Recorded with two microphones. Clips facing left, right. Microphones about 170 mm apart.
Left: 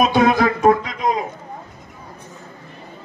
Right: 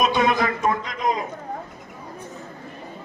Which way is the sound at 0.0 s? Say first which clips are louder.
Left 5 dB; 65° left (ahead or behind).